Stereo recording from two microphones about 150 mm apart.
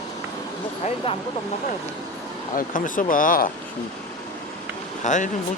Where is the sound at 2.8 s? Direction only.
60° left (ahead or behind).